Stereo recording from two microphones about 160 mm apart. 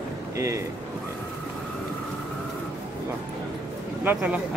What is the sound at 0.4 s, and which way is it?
Speech, 20° right (ahead or behind).